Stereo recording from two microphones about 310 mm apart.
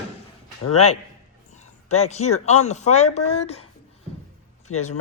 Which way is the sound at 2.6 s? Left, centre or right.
Left.